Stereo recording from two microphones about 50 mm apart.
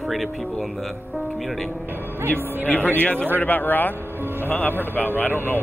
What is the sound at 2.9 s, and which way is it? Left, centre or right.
A man's voice, left.